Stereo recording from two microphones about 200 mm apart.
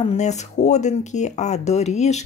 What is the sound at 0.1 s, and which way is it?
Speech, 35° left (ahead or behind).